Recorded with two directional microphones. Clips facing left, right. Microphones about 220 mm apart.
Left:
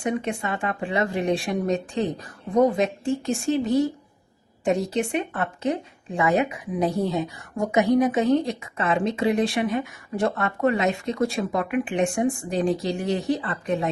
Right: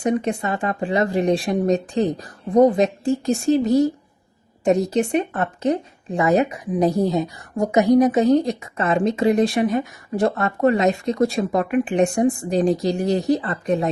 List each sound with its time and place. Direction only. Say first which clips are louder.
0.0 s speech: right 5 dB; 40° right (ahead or behind)